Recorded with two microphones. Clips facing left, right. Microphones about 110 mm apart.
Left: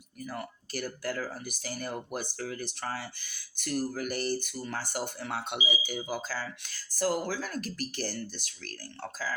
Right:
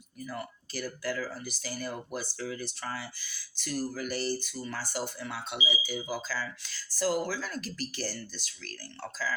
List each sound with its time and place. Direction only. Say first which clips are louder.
0.3 s speech: left 1 dB; 50° left (ahead or behind)